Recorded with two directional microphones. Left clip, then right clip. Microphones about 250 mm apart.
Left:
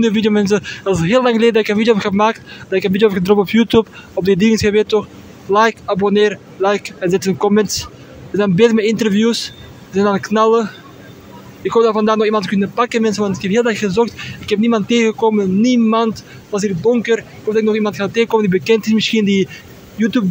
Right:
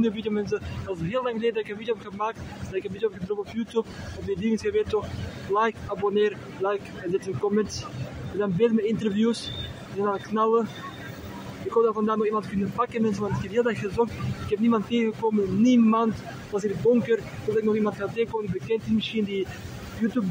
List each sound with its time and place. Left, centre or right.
0.0 s speech: left
11.7 s speech: left